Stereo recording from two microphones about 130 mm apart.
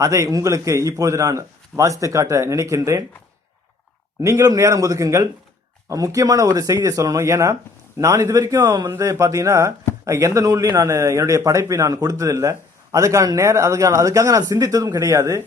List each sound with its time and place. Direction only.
0.0 s a man's voice: 25° right (ahead or behind)
4.2 s a man's voice: 25° right (ahead or behind)